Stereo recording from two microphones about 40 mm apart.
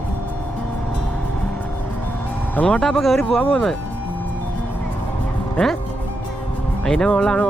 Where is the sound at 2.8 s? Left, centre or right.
Centre.